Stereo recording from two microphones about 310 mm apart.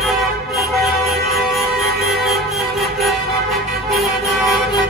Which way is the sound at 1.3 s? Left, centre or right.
Centre.